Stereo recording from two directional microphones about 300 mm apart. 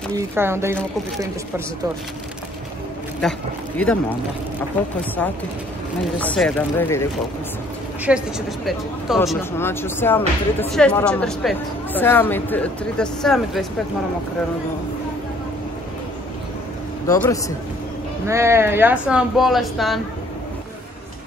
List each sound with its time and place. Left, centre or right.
0.1 s speech: centre
3.2 s speech: centre
6.4 s speech: centre
8.1 s speech: centre
17.1 s speech: centre
18.2 s speech: centre